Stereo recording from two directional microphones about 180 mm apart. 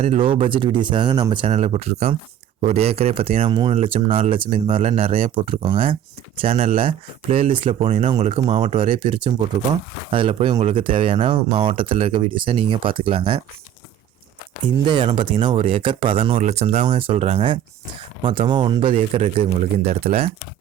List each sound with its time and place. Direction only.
0.0 s speech: 30° right (ahead or behind)
7.8 s speech: 40° right (ahead or behind)
15.0 s speech: 30° right (ahead or behind)
19.8 s speech: 60° right (ahead or behind)